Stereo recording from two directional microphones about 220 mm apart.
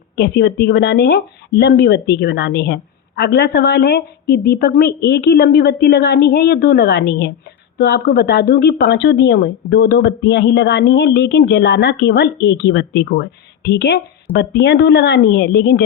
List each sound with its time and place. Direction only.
0.2 s speech: 50° left (ahead or behind)